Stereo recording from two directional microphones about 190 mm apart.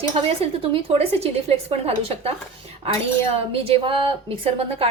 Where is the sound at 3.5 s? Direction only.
30° right (ahead or behind).